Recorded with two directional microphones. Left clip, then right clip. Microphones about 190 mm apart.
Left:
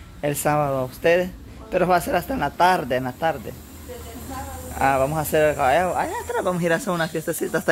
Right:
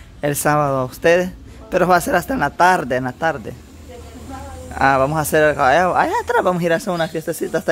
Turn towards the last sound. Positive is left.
turn(degrees=-10)  # may be behind; listen again after turning